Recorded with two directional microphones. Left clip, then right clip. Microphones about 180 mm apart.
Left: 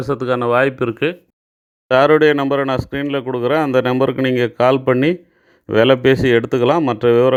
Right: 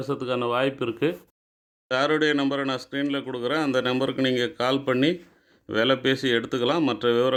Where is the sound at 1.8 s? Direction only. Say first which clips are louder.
Left 11 dB; 45° left (ahead or behind).